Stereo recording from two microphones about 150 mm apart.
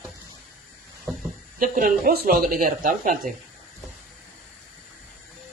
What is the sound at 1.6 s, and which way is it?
Speech, 70° right (ahead or behind).